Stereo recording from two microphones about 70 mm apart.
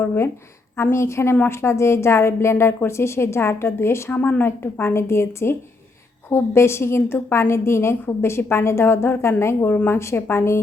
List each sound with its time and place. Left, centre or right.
0.8 s a woman's voice: left
4.1 s a woman's voice: left
9.7 s a woman's voice: left
10.0 s a woman's voice: left